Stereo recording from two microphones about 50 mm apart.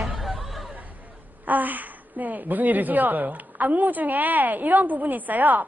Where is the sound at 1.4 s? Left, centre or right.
Right.